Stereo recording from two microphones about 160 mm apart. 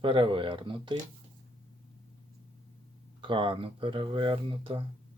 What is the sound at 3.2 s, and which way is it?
Speech, 30° right (ahead or behind).